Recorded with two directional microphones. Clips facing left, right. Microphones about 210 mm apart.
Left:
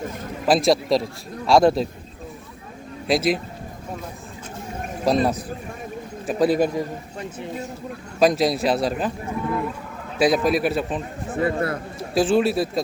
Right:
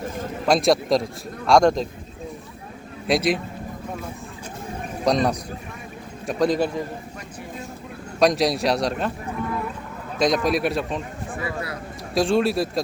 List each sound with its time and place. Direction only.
0.4 s a man's voice: centre (ahead or behind)
3.1 s a man's voice: centre (ahead or behind)
5.0 s a man's voice: 5° left (ahead or behind)
8.2 s a man's voice: centre (ahead or behind)
10.2 s a man's voice: 5° left (ahead or behind)
11.3 s speech: 50° left (ahead or behind)
12.1 s a man's voice: centre (ahead or behind)